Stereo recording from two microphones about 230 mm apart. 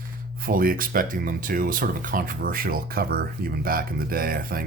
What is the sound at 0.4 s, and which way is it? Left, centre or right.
Speech, right.